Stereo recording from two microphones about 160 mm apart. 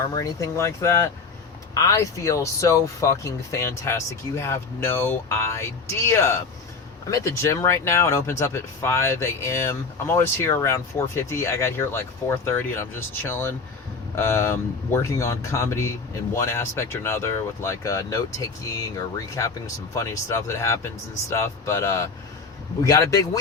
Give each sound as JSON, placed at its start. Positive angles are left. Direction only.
{"t": 0.1, "sound": "speech", "side_deg": 20}